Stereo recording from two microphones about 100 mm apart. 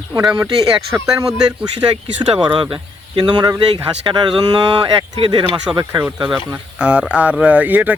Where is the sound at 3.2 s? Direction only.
45° right (ahead or behind).